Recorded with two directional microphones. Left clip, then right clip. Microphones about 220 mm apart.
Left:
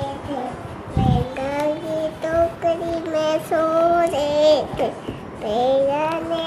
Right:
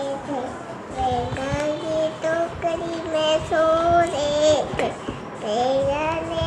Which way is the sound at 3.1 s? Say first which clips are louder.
Right 1 dB; 20° left (ahead or behind).